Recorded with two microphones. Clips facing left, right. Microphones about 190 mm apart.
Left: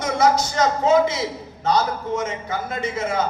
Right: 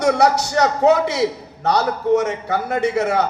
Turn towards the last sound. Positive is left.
turn(degrees=-70)  # may be behind; listen again after turning